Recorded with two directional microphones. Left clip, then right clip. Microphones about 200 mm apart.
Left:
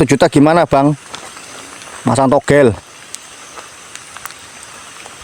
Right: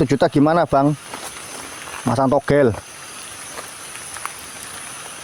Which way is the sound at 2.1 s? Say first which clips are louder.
Left 6 dB; 35° left (ahead or behind).